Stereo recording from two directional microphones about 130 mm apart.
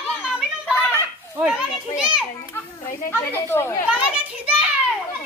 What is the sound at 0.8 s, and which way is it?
Children playing, 15° left (ahead or behind).